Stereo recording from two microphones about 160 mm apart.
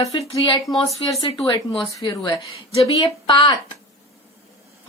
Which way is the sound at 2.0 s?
25° left (ahead or behind).